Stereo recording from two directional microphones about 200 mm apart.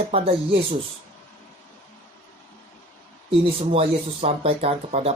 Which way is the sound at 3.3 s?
30° right (ahead or behind).